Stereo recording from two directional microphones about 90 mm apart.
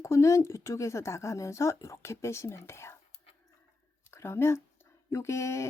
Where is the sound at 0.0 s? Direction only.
35° left (ahead or behind).